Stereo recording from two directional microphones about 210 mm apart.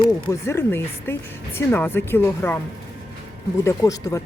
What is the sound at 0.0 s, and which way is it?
Speech, 15° left (ahead or behind).